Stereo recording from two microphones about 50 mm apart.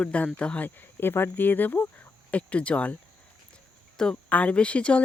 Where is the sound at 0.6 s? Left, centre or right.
Left.